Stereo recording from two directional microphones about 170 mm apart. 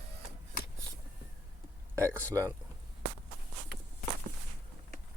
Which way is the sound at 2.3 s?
15° right (ahead or behind).